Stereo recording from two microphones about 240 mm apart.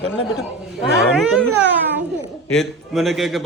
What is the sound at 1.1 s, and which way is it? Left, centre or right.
Speech, centre.